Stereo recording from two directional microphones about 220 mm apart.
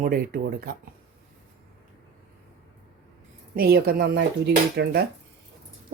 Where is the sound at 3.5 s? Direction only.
45° right (ahead or behind).